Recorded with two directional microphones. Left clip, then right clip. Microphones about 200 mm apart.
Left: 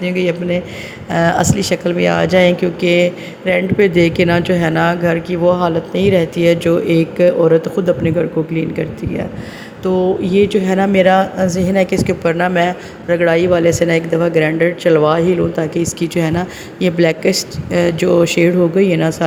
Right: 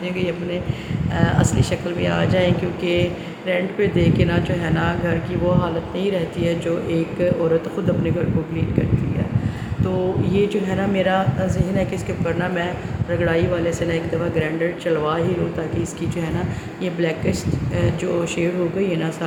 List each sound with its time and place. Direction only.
0.0 s speech: 40° left (ahead or behind)
9.8 s a woman's voice: 35° left (ahead or behind)